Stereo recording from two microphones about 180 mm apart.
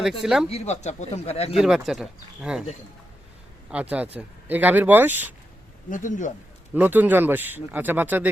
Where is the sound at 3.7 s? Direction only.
5° right (ahead or behind).